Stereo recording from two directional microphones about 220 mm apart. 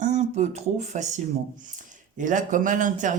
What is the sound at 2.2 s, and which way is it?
Speech, 35° right (ahead or behind).